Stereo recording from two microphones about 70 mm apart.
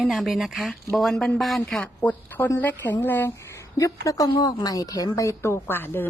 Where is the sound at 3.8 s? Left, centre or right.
Left.